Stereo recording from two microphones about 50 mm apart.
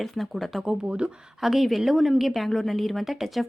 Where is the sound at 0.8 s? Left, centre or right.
Right.